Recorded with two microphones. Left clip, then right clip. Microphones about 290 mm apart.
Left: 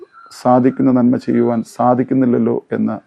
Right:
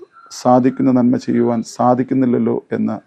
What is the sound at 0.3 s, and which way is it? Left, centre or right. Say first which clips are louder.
Speech: even; left.